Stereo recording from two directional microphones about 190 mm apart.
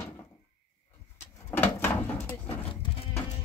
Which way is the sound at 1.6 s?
10° left (ahead or behind).